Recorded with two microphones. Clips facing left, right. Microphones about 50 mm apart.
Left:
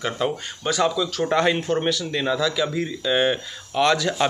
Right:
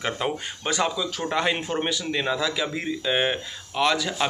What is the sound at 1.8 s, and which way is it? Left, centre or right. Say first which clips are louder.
Speech: left 3 dB; centre.